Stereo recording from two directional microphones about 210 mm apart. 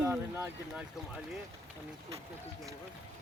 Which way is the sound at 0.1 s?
10° right (ahead or behind).